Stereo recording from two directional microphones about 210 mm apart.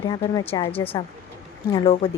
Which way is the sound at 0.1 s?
20° left (ahead or behind).